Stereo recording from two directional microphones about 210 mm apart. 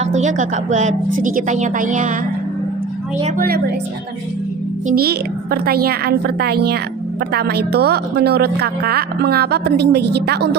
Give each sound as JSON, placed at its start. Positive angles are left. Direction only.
{"t": 0.0, "sound": "a woman's voice", "side_deg": -35}
{"t": 3.3, "sound": "a woman's voice", "side_deg": -45}
{"t": 4.9, "sound": "a woman's voice", "side_deg": -45}